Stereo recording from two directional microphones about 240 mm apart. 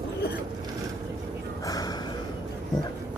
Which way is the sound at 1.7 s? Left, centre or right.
Centre.